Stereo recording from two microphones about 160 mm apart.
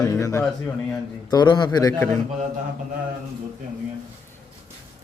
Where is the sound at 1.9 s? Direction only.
15° left (ahead or behind).